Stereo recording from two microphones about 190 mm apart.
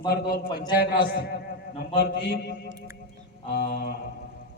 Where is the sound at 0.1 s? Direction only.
55° left (ahead or behind).